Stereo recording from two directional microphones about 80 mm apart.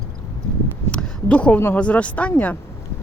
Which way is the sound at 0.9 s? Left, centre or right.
Centre.